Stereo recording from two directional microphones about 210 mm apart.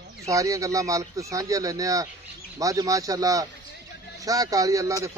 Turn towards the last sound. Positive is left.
turn(degrees=-15)  # may be behind; listen again after turning